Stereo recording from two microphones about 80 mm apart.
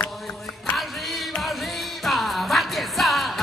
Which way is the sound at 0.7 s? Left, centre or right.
Centre.